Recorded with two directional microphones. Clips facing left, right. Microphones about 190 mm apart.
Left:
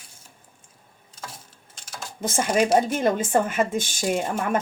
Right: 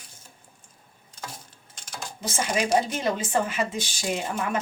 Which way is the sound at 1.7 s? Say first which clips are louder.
Even; 5° left (ahead or behind).